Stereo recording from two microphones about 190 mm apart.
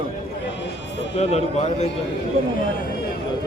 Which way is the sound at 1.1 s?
35° left (ahead or behind).